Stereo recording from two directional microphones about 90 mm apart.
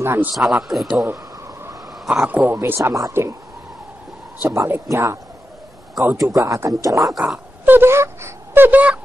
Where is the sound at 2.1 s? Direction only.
10° right (ahead or behind); by 3.4 s 30° right (ahead or behind).